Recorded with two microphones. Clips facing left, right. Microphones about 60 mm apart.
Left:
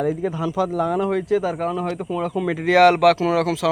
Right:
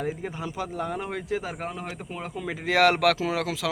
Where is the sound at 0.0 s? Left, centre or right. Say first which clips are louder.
Left 9 dB; left.